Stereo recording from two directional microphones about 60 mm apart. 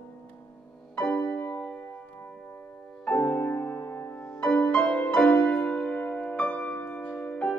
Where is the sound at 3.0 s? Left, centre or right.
Left.